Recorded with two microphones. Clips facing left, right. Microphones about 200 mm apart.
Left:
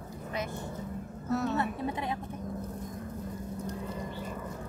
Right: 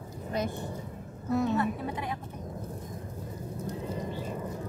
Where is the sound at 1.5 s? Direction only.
20° left (ahead or behind).